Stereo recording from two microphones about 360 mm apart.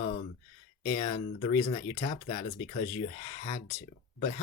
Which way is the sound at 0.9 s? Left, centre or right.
Centre.